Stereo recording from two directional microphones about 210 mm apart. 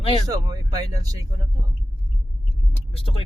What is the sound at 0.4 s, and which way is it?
Speech, 20° right (ahead or behind).